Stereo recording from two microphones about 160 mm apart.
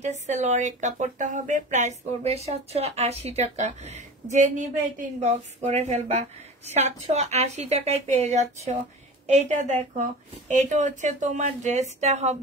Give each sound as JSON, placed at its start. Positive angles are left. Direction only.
{"t": 0.0, "sound": "speech", "side_deg": -45}